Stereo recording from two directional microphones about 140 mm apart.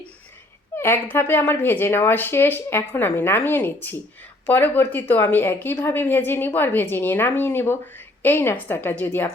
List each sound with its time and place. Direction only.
0.8 s a woman's voice: 15° left (ahead or behind)